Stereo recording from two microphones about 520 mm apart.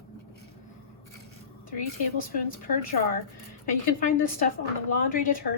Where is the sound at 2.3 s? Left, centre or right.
Centre.